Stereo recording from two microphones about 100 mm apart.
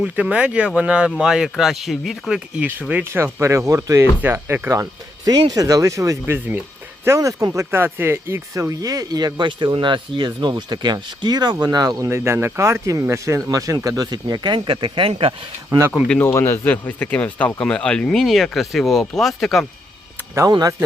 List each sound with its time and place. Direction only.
0.0 s speech: 10° right (ahead or behind)
3.0 s speech: 25° right (ahead or behind)
5.2 s speech: 40° right (ahead or behind)
12.0 s speech: 25° right (ahead or behind); by 15.8 s 60° right (ahead or behind)
16.2 s speech: 25° left (ahead or behind); by 19.6 s centre (ahead or behind)
20.5 s speech: 40° right (ahead or behind)